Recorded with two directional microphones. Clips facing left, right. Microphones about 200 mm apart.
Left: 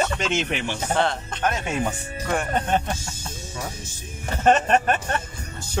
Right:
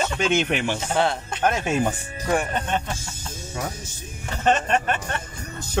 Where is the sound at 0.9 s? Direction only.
10° right (ahead or behind).